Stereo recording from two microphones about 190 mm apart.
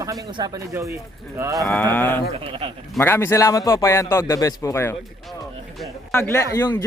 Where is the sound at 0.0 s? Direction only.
20° right (ahead or behind).